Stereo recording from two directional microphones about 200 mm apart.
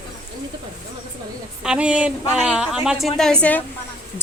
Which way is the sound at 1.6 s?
5° right (ahead or behind).